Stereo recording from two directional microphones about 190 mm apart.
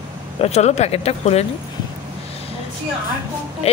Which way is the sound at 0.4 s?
35° left (ahead or behind).